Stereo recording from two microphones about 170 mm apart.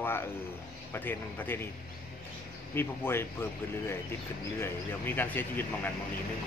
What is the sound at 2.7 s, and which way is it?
Speech, 15° left (ahead or behind).